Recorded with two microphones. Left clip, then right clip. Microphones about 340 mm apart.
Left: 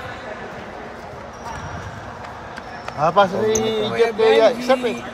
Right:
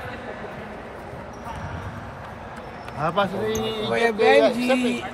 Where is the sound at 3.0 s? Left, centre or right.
Centre.